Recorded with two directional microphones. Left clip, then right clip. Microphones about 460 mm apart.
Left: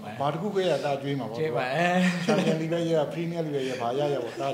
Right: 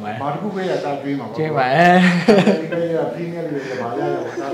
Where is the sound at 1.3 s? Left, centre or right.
Centre.